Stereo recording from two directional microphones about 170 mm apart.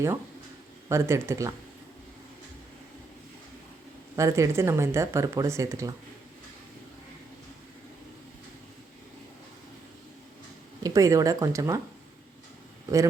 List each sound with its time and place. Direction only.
0.9 s speech: 15° right (ahead or behind)
4.1 s speech: 15° right (ahead or behind)
10.8 s speech: 20° right (ahead or behind)